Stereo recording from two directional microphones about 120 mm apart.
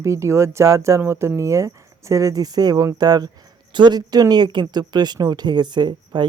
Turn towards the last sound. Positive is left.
turn(degrees=-40)  # may be behind; listen again after turning